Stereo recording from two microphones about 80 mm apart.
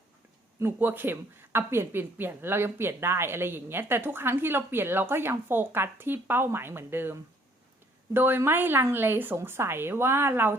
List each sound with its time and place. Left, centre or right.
0.6 s speech: right